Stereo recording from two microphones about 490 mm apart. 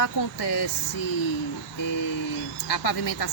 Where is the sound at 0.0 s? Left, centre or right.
Left.